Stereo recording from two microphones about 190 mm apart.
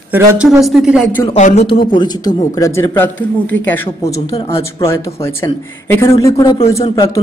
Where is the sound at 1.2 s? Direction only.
35° left (ahead or behind).